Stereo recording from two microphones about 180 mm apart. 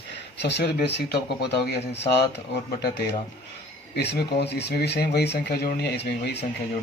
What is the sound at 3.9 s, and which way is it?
Speech, 70° left (ahead or behind).